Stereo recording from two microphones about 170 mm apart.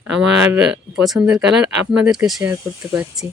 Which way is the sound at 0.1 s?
5° right (ahead or behind).